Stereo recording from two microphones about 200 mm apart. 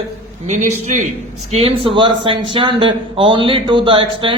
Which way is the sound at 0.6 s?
90° right.